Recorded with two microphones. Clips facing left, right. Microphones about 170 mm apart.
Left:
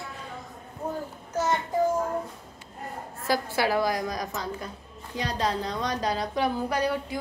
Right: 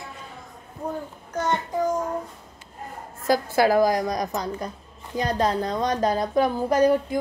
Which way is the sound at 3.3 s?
45° right (ahead or behind).